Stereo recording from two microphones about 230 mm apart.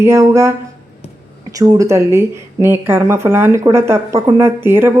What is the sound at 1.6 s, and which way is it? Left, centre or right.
Speech, centre.